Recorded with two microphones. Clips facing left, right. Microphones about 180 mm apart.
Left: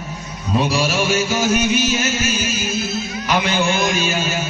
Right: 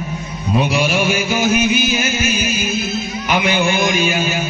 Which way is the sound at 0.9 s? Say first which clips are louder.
Right 1 dB; 10° right (ahead or behind).